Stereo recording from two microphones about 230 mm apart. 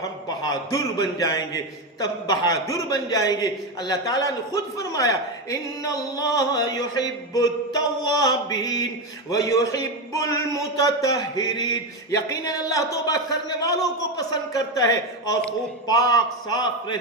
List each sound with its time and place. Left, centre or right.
0.0 s a man's voice: centre